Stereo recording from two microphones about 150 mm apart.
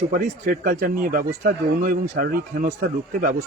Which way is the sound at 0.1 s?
65° right (ahead or behind).